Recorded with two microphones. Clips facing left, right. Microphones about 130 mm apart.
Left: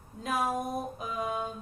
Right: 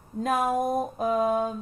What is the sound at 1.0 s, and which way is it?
Speech, 50° right (ahead or behind).